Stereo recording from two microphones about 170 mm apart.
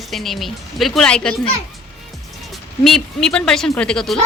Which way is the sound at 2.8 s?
5° left (ahead or behind).